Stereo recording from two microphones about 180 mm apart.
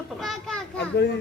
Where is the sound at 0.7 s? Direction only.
70° left (ahead or behind).